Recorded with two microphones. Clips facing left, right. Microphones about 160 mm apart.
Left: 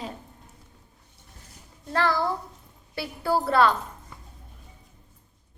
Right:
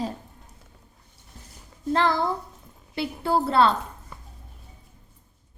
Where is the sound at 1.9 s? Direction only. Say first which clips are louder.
Right 2 dB; 20° right (ahead or behind).